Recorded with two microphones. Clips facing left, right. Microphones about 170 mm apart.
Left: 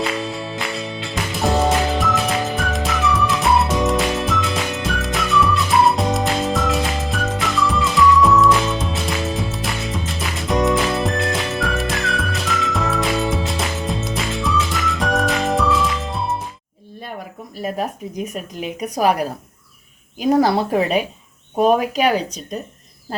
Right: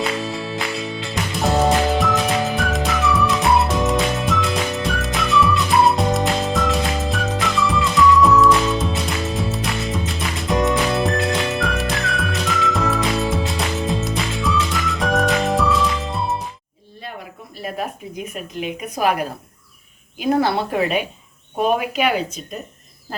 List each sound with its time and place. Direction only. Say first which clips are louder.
0.3 s music: right 1 dB; centre (ahead or behind)
17.6 s a woman's voice: left 3 dB; 40° left (ahead or behind)